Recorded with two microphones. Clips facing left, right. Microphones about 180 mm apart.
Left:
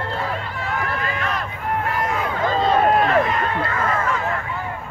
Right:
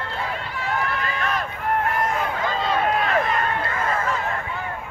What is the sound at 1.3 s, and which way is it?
Run, 50° right (ahead or behind).